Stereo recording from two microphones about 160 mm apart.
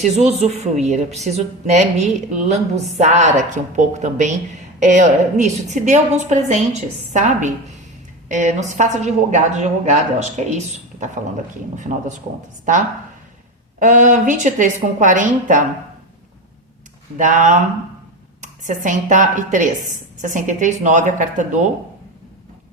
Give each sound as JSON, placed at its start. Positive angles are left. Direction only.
{"t": 0.0, "sound": "a woman's voice", "side_deg": -45}
{"t": 13.7, "sound": "a woman's voice", "side_deg": -50}
{"t": 17.2, "sound": "a woman's voice", "side_deg": -50}